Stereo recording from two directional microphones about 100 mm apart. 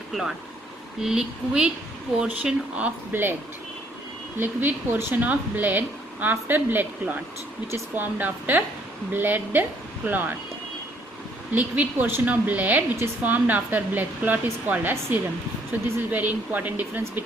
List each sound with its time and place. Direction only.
0.1 s speech: 5° right (ahead or behind); by 3.3 s 20° right (ahead or behind)
4.4 s a woman's voice: 20° right (ahead or behind)
11.5 s a woman's voice: 15° right (ahead or behind)